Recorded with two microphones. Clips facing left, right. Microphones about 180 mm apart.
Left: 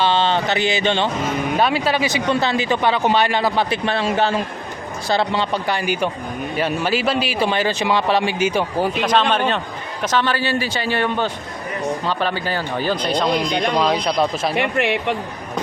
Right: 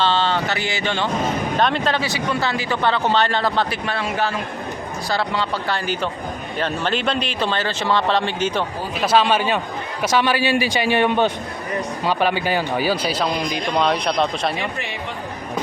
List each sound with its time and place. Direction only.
0.0 s a sound: 15° left (ahead or behind)
1.5 s speech: 5° left (ahead or behind)
3.7 s a man's voice: 25° left (ahead or behind); by 8.6 s 10° left (ahead or behind)
9.0 s a man's voice: 5° right (ahead or behind)
14.5 s speech: 65° left (ahead or behind)